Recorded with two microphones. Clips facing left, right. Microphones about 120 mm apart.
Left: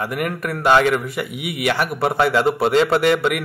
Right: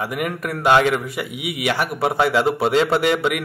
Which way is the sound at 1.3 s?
50° left (ahead or behind).